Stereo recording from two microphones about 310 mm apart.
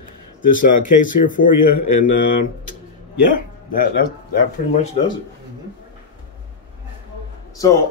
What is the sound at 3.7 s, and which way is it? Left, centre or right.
Speech, left.